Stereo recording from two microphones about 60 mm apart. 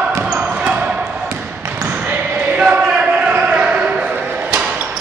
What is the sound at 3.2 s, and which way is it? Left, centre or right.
Basketball bounce, centre.